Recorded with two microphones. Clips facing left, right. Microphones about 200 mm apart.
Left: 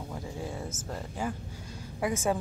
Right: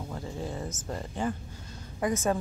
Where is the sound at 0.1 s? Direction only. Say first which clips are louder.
Right 2 dB; 10° left (ahead or behind).